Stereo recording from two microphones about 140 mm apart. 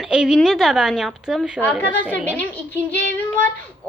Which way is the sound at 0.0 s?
5° right (ahead or behind).